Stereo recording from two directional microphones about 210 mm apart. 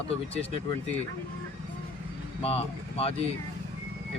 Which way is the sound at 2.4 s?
30° left (ahead or behind).